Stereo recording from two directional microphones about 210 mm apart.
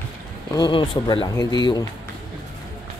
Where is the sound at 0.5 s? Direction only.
20° left (ahead or behind).